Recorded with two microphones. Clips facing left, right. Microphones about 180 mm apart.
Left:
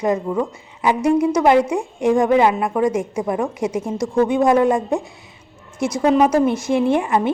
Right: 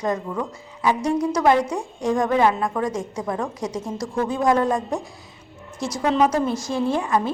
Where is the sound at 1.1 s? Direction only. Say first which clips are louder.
Left 8 dB; 5° left (ahead or behind).